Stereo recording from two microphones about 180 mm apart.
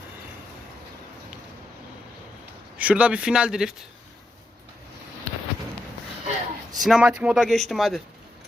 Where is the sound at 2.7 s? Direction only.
5° right (ahead or behind).